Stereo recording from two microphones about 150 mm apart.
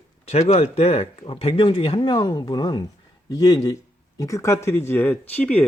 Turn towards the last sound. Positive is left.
turn(degrees=10)  # may be behind; listen again after turning